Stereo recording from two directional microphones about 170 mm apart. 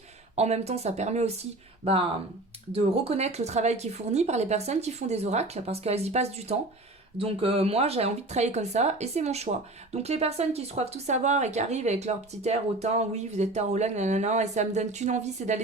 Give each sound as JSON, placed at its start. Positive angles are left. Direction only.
{"t": 0.3, "sound": "speech", "side_deg": -40}